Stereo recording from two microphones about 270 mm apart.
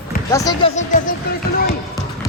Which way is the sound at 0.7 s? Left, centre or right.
Left.